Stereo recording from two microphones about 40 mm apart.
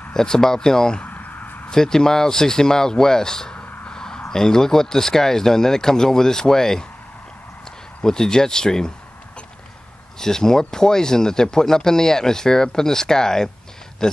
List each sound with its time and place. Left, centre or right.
0.1 s speech: centre
1.0 s a sound: left
1.7 s speech: centre
3.9 s a sound: centre
4.3 s speech: centre
8.0 s speech: centre
10.1 s speech: centre